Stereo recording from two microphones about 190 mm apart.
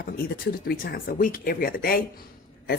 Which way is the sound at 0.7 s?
50° left (ahead or behind).